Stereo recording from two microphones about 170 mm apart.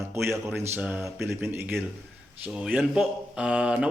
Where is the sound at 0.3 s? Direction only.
15° right (ahead or behind).